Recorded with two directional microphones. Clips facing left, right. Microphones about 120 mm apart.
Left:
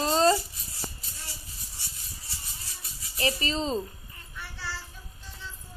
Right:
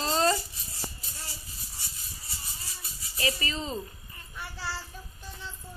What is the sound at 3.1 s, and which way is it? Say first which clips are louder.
Speech: left 3 dB; 30° left (ahead or behind).